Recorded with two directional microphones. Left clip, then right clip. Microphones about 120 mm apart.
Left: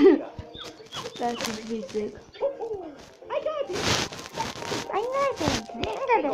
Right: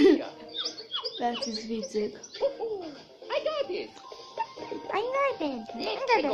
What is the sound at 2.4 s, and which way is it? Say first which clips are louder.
Bird: left 1 dB; 30° right (ahead or behind).